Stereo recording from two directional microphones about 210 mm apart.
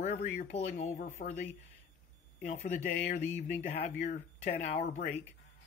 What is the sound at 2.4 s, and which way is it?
Speech, 35° left (ahead or behind).